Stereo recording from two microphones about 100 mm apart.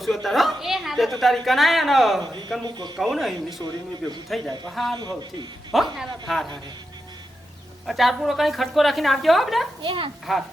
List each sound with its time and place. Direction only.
0.0 s a woman's voice: centre (ahead or behind)
2.6 s speech: 45° right (ahead or behind)
3.0 s a woman's voice: centre (ahead or behind)
4.9 s speech: 45° right (ahead or behind)
5.7 s a woman's voice: centre (ahead or behind)
7.9 s a woman's voice: centre (ahead or behind)
9.8 s a child's voice: 55° right (ahead or behind)
10.3 s a woman's voice: centre (ahead or behind)